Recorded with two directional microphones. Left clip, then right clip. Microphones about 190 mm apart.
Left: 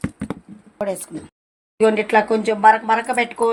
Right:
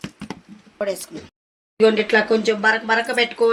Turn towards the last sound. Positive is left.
turn(degrees=20)  # may be behind; listen again after turning